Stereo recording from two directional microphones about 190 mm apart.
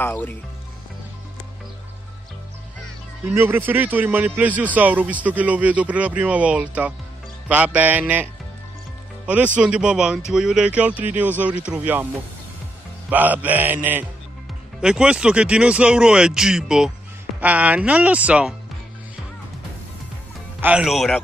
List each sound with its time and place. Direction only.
0.0 s speech: 10° left (ahead or behind)
3.3 s a man's voice: 10° right (ahead or behind)
13.1 s a man's voice: 10° right (ahead or behind)
20.6 s speech: 5° right (ahead or behind)